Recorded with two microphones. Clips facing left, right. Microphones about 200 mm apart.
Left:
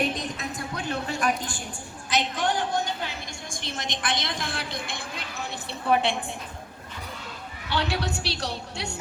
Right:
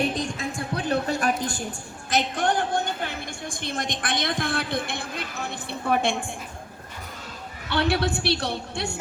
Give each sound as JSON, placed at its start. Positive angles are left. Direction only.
{"t": 0.2, "sound": "a sound", "side_deg": -30}
{"t": 2.1, "sound": "a woman's voice", "side_deg": -50}
{"t": 7.7, "sound": "a woman's voice", "side_deg": -55}